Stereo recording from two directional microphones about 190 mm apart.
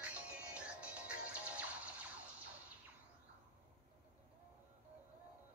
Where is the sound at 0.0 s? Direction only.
5° right (ahead or behind).